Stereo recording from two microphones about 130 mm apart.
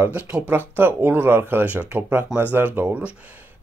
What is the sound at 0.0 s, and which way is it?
Speech, 15° right (ahead or behind).